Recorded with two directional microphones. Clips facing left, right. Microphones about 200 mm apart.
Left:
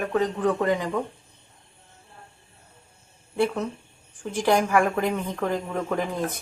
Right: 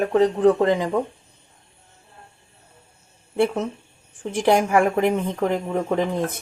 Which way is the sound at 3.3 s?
25° right (ahead or behind).